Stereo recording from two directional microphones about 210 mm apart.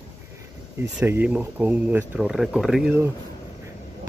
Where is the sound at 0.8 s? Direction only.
10° right (ahead or behind).